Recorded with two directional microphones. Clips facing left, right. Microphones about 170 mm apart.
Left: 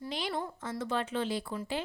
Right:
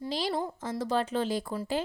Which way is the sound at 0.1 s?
35° right (ahead or behind).